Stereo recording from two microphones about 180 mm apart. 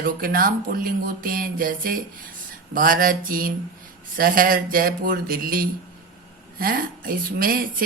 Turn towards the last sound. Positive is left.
turn(degrees=-55)  # may be behind; listen again after turning